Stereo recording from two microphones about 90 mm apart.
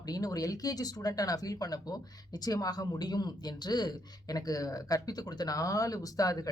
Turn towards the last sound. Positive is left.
turn(degrees=40)  # may be behind; listen again after turning